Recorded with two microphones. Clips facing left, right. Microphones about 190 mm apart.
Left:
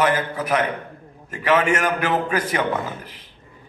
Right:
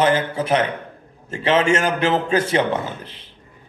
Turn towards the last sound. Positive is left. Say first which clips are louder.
# right 1 dB
turn(degrees=-25)  # may be behind; listen again after turning